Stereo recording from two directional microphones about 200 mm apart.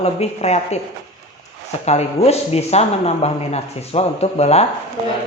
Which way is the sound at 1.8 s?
30° left (ahead or behind).